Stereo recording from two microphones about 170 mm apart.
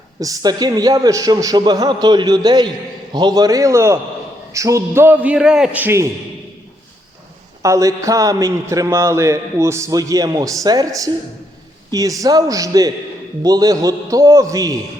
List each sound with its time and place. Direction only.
0.2 s a man's voice: 20° right (ahead or behind)
7.6 s a man's voice: 20° right (ahead or behind)